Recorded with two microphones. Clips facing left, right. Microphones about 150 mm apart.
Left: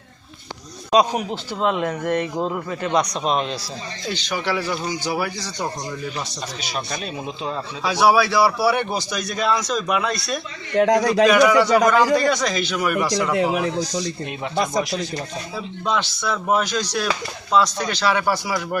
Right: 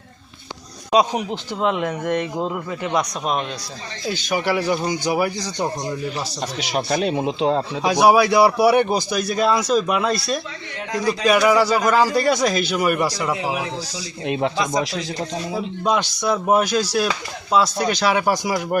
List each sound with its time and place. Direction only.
0.9 s a man's voice: 10° right (ahead or behind)
6.6 s speech: 75° right (ahead or behind)
7.9 s a man's voice: 15° right (ahead or behind)
10.8 s a man's voice: 70° left (ahead or behind)
11.3 s a man's voice: 5° right (ahead or behind)
15.5 s a man's voice: 15° right (ahead or behind)